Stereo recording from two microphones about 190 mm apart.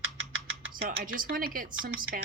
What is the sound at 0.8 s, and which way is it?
Speech, 50° right (ahead or behind).